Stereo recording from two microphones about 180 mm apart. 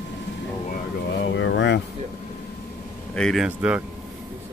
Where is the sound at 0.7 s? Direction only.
70° left (ahead or behind).